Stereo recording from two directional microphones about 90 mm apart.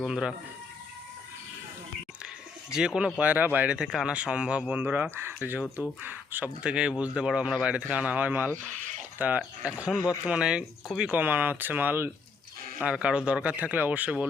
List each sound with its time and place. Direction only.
0.0 s speech: 10° right (ahead or behind)
2.6 s speech: 5° right (ahead or behind)
3.2 s speech: 20° right (ahead or behind)
11.1 s speech: 20° right (ahead or behind)
12.8 s speech: 10° right (ahead or behind)